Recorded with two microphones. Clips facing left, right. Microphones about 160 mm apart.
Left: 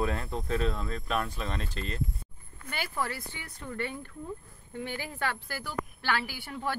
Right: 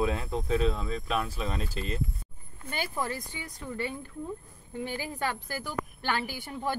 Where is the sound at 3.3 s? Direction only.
15° right (ahead or behind).